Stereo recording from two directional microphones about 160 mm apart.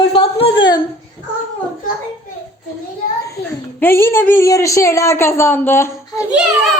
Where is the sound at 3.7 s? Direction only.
15° left (ahead or behind).